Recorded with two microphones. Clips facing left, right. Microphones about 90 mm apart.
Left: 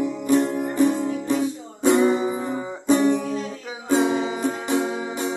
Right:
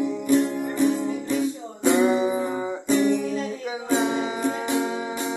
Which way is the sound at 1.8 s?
Centre (ahead or behind).